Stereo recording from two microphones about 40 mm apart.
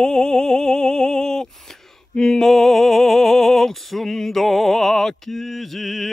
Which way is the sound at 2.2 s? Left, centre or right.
Centre.